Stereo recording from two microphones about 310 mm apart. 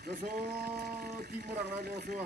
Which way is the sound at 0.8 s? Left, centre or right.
Right.